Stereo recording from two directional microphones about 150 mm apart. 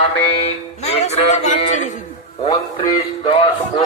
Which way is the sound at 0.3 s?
40° left (ahead or behind).